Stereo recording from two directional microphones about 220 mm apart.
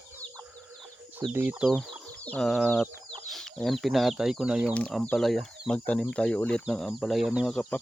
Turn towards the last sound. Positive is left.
turn(degrees=5)  # may be behind; listen again after turning